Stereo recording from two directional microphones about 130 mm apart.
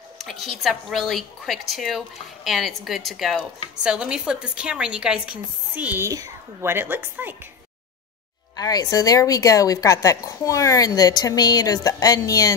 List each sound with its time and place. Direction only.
0.2 s a woman's voice: centre (ahead or behind); by 7.3 s 15° right (ahead or behind)
8.5 s a woman's voice: 30° left (ahead or behind)